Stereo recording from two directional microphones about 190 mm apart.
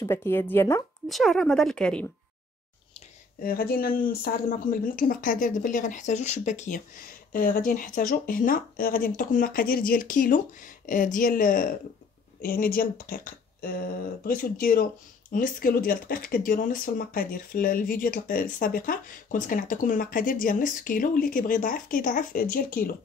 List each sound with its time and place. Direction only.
0.0 s speech: 15° left (ahead or behind)
1.0 s speech: centre (ahead or behind)
3.4 s speech: 50° left (ahead or behind)